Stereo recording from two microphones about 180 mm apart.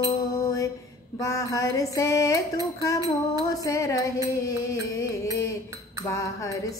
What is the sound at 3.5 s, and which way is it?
Music, 20° left (ahead or behind).